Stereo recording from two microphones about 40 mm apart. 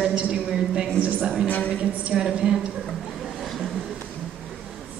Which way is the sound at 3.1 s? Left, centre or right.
Centre.